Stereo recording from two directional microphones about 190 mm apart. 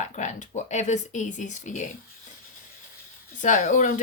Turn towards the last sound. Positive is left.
turn(degrees=40)  # may be behind; listen again after turning